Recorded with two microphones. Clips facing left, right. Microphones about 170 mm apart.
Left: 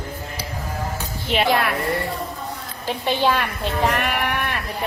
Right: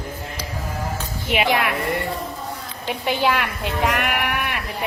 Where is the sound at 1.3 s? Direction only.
10° right (ahead or behind).